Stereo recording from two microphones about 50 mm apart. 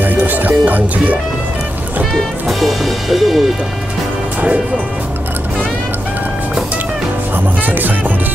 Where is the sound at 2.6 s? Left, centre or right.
Centre.